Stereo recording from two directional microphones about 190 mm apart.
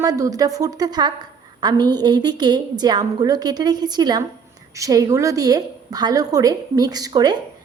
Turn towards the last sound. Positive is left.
turn(degrees=-20)  # may be behind; listen again after turning